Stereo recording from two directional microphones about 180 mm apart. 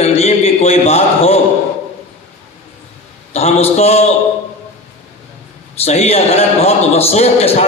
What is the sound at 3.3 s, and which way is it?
Speech, 35° left (ahead or behind).